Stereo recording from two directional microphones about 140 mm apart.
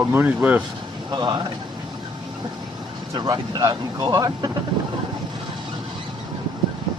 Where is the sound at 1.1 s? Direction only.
30° right (ahead or behind).